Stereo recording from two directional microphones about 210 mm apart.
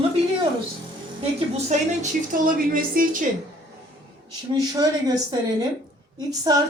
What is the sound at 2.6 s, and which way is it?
Speech, 45° right (ahead or behind).